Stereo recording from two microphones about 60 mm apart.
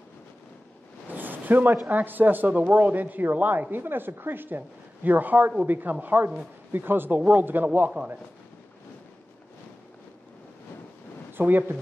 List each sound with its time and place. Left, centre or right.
1.1 s a sound: right
1.9 s speech: right
11.3 s speech: right